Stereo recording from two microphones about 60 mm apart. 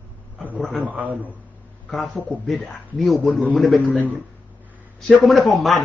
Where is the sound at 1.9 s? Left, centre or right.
Centre.